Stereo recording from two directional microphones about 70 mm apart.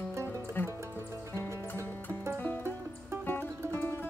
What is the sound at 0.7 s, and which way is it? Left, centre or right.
Music, right.